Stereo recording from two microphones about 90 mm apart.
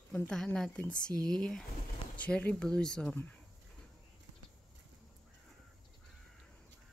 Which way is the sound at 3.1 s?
25° left (ahead or behind).